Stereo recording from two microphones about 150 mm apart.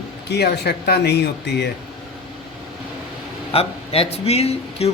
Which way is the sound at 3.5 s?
40° left (ahead or behind).